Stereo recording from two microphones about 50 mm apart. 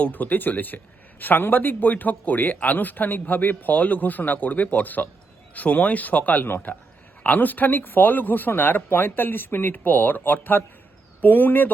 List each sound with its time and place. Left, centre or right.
0.0 s a man's voice: left